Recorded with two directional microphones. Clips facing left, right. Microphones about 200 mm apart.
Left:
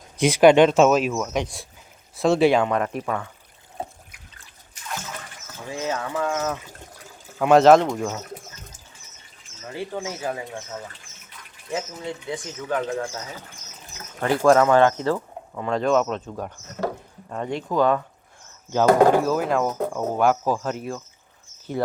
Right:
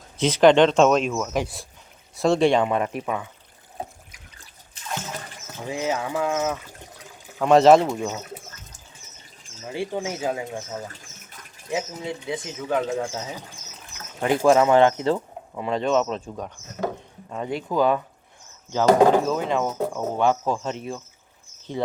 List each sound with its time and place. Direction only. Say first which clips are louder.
0.2 s speech: left 1 dB; 10° left (ahead or behind); by 3.2 s 5° right (ahead or behind)
5.0 s speech: right 2 dB; 20° right (ahead or behind)
7.3 s speech: even; centre (ahead or behind)
9.6 s speech: right 2 dB; 15° right (ahead or behind)
10.8 s bird: right 2 dB; 40° right (ahead or behind)
11.7 s speech: right 1 dB; 10° right (ahead or behind)
12.9 s speech: right 1 dB; 20° right (ahead or behind)
15.6 s speech: left 1 dB; centre (ahead or behind)
17.2 s speech: even; 5° right (ahead or behind)
18.7 s speech: left 1 dB; 15° left (ahead or behind)
19.3 s speech: left 2 dB; 5° left (ahead or behind)